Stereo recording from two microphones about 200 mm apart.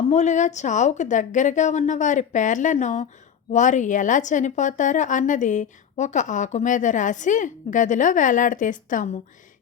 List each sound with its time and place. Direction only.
0.1 s a woman's voice: 35° left (ahead or behind)